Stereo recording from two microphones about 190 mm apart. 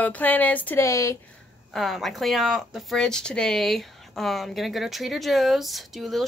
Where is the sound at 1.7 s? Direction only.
Centre (ahead or behind).